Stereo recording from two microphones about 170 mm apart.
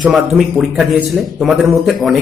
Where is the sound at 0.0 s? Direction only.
Centre (ahead or behind).